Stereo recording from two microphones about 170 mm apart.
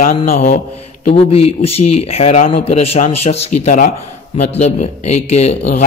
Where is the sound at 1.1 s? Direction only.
35° left (ahead or behind).